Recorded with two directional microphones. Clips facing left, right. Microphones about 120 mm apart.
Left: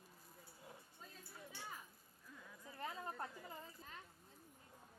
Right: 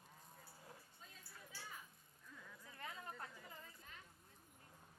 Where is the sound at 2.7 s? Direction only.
30° left (ahead or behind).